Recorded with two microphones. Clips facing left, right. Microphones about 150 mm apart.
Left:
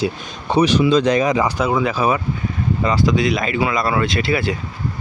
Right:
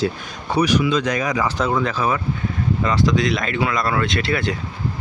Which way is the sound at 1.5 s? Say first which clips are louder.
Left 2 dB; 10° left (ahead or behind).